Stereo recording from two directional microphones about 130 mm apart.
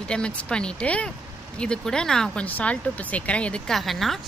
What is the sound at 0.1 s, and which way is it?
Speech, 5° left (ahead or behind).